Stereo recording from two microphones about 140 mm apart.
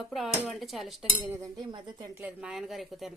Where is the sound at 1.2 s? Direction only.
20° right (ahead or behind).